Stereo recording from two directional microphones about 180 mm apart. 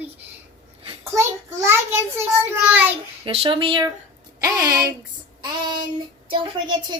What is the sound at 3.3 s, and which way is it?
Speech, 30° right (ahead or behind).